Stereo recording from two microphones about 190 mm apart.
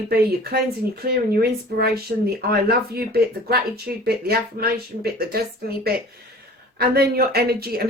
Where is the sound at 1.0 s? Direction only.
55° right (ahead or behind).